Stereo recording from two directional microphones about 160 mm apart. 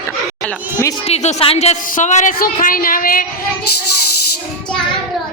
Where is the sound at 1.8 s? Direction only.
55° left (ahead or behind).